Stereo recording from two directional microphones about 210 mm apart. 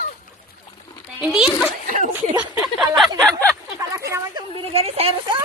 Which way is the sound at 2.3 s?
10° right (ahead or behind).